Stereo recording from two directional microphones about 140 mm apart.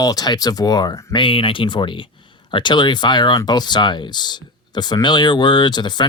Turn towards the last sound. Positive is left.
turn(degrees=30)  # may be behind; listen again after turning